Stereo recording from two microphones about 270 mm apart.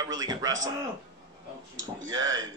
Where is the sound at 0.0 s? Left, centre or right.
Centre.